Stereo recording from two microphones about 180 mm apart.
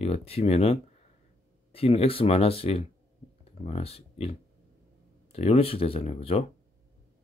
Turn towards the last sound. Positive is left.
turn(degrees=35)  # may be behind; listen again after turning